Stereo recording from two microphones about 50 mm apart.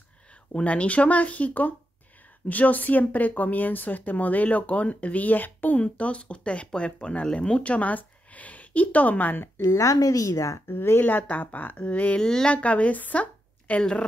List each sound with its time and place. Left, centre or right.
0.6 s a woman's voice: left
9.8 s speech: left
10.7 s a woman's voice: left
12.2 s speech: centre
12.4 s a woman's voice: left